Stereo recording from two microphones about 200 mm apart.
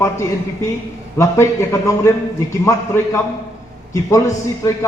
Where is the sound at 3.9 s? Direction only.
15° left (ahead or behind).